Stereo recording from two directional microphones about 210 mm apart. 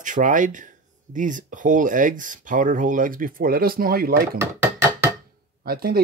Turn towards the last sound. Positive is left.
turn(degrees=-45)  # may be behind; listen again after turning